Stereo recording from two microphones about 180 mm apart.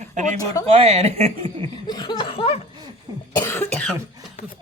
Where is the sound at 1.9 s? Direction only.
25° left (ahead or behind).